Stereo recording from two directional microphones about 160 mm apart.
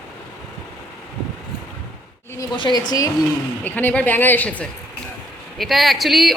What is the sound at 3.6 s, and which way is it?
A woman's voice, 10° left (ahead or behind).